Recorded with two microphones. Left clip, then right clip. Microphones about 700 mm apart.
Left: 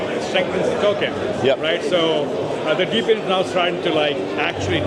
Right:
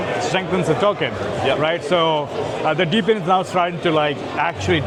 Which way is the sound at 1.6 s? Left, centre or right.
Right.